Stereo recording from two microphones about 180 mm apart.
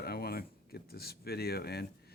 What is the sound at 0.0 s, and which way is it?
Speech, 60° left (ahead or behind).